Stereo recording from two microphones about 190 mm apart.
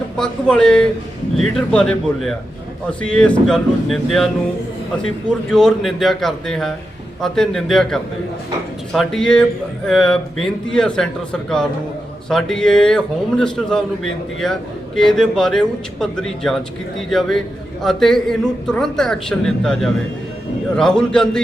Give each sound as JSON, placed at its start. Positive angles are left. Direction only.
{"t": 0.2, "sound": "a man's voice", "side_deg": 5}